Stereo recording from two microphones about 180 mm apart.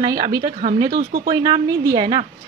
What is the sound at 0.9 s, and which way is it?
Speech, 55° right (ahead or behind).